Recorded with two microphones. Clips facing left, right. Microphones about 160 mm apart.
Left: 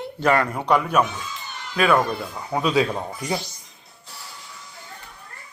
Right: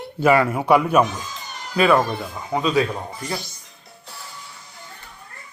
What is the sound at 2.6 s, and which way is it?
Speech, 10° left (ahead or behind).